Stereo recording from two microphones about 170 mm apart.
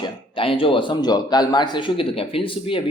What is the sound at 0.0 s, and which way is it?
Speech, 30° left (ahead or behind).